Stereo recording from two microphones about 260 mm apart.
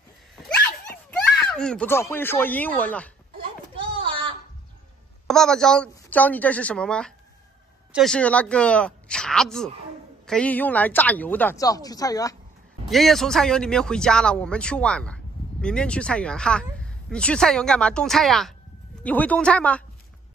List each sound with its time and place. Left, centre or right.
1.4 s a woman's voice: centre
3.3 s a sound: centre
5.2 s a woman's voice: centre
12.8 s speech: centre